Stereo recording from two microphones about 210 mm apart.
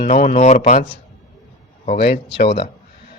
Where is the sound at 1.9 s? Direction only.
45° left (ahead or behind).